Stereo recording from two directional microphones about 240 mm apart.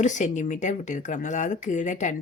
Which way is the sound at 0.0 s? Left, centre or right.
Left.